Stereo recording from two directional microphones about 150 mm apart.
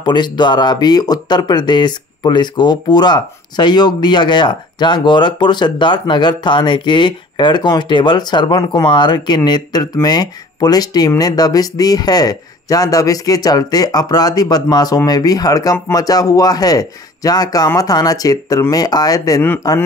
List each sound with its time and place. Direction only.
0.0 s speech: 30° left (ahead or behind)